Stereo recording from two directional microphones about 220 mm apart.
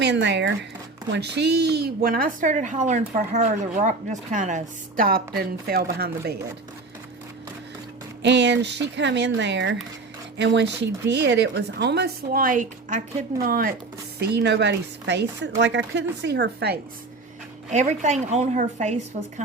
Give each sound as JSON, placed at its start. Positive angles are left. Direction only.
{"t": 0.0, "sound": "a woman's voice", "side_deg": -50}
{"t": 8.2, "sound": "a woman's voice", "side_deg": -55}
{"t": 17.7, "sound": "a woman's voice", "side_deg": -30}